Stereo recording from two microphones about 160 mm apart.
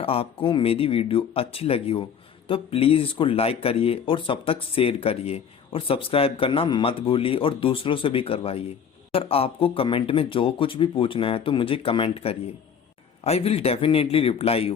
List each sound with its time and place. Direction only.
0.0 s speech: 35° left (ahead or behind)